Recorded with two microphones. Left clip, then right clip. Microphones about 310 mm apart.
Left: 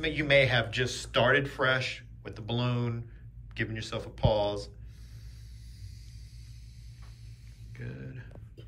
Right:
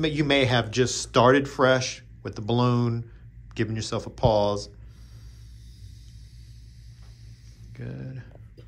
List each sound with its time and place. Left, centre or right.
0.0 s speech: centre
7.7 s speech: centre